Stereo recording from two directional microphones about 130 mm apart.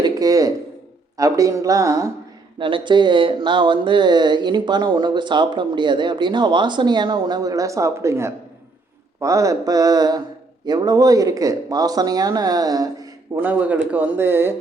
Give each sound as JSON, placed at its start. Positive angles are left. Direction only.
{"t": 0.0, "sound": "a sound", "side_deg": -25}
{"t": 1.1, "sound": "speech", "side_deg": -25}
{"t": 2.6, "sound": "speech", "side_deg": -40}
{"t": 13.4, "sound": "speech", "side_deg": -10}